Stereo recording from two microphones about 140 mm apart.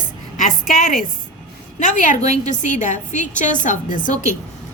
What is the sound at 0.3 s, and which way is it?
A woman's voice, 70° left (ahead or behind).